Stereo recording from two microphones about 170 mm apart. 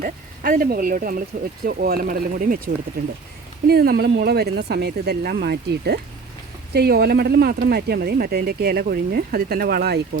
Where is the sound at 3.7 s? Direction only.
65° right (ahead or behind).